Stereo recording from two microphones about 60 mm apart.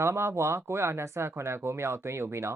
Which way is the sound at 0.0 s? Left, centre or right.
Right.